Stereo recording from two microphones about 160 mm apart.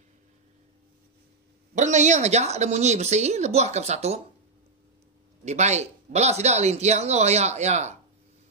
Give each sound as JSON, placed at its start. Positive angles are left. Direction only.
{"t": 1.8, "sound": "speech", "side_deg": -50}
{"t": 5.4, "sound": "speech", "side_deg": -45}